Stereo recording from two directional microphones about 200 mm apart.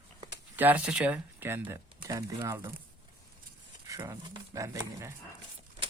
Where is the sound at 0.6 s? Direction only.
10° right (ahead or behind).